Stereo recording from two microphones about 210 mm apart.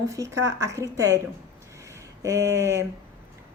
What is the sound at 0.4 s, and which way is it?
Speech, 15° right (ahead or behind).